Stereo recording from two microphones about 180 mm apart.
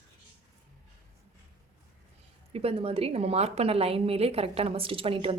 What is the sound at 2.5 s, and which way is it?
A woman's voice, 35° right (ahead or behind).